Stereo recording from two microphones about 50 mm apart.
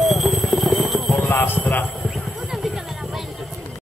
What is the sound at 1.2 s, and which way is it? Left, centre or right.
Speech, left.